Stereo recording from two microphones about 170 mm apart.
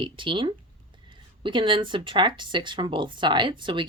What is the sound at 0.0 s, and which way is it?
Speech, 30° right (ahead or behind).